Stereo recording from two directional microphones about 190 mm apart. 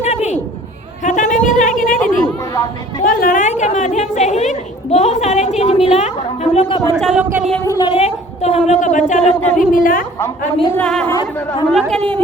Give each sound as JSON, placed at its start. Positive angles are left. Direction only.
{"t": 0.0, "sound": "a sound", "side_deg": 35}
{"t": 2.2, "sound": "chatter", "side_deg": 20}
{"t": 3.0, "sound": "a woman's voice", "side_deg": 45}
{"t": 7.0, "sound": "speech", "side_deg": -5}
{"t": 7.6, "sound": "a woman's voice", "side_deg": 15}
{"t": 7.9, "sound": "a woman's voice", "side_deg": 35}
{"t": 10.2, "sound": "a woman's voice", "side_deg": 15}
{"t": 10.8, "sound": "speech", "side_deg": 5}
{"t": 11.1, "sound": "a woman's voice", "side_deg": 15}
{"t": 11.7, "sound": "speech", "side_deg": 0}